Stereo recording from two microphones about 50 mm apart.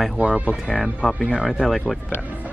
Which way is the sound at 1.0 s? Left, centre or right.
Left.